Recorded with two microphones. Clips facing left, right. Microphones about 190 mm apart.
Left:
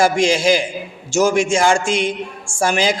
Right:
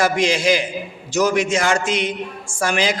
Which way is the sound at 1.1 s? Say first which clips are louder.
Left 3 dB; 25° left (ahead or behind).